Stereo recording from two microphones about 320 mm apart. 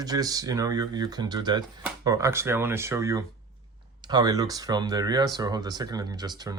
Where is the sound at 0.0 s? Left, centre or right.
Centre.